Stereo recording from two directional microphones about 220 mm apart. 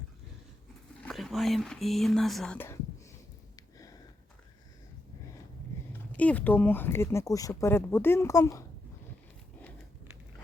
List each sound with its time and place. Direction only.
1.0 s speech: centre (ahead or behind)
3.5 s a sound: 15° left (ahead or behind)
6.1 s speech: 5° left (ahead or behind)